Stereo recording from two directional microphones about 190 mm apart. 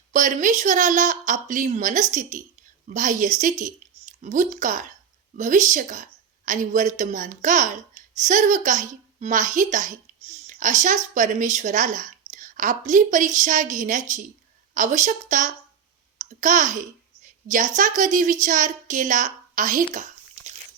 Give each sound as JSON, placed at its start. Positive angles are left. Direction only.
{"t": 0.1, "sound": "a woman's voice", "side_deg": -40}